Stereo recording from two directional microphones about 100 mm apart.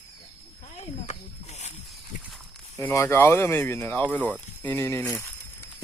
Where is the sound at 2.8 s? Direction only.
25° left (ahead or behind).